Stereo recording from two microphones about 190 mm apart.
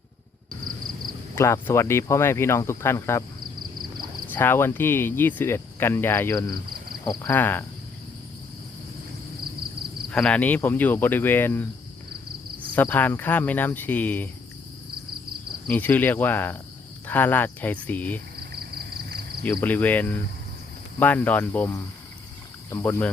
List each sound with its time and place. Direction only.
1.4 s cricket: 15° left (ahead or behind)
4.3 s cricket: 10° left (ahead or behind)
10.1 s cricket: 5° left (ahead or behind)
12.7 s cricket: 10° left (ahead or behind)
15.7 s cricket: 10° left (ahead or behind)
18.3 s a sound: 55° right (ahead or behind)
19.5 s cricket: 10° left (ahead or behind)